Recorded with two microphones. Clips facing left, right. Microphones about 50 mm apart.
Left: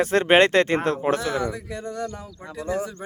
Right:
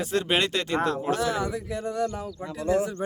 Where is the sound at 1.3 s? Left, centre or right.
Centre.